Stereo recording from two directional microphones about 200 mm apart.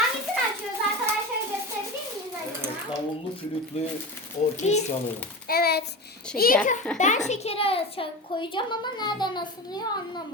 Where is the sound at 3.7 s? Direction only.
30° left (ahead or behind).